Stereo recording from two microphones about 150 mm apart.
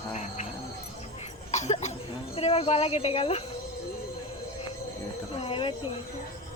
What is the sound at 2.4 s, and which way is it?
A woman's voice, 40° left (ahead or behind).